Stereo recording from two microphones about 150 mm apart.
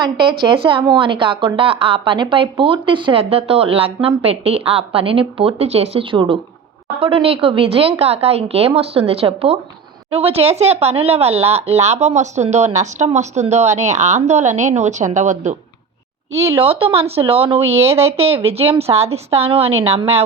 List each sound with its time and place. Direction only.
0.0 s speech: 30° right (ahead or behind); by 15.5 s 50° right (ahead or behind)
16.6 s speech: 40° right (ahead or behind)
17.8 s speech: 20° right (ahead or behind)
18.4 s speech: 40° right (ahead or behind)